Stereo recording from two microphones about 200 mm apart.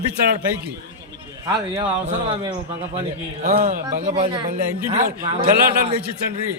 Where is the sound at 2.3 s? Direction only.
25° right (ahead or behind).